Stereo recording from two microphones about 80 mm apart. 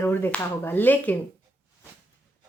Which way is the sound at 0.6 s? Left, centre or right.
Left.